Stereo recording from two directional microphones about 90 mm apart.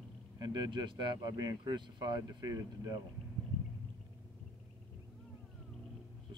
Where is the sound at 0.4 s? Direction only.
50° right (ahead or behind).